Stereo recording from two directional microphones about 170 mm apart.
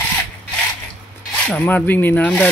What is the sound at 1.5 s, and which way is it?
Speech, 10° left (ahead or behind).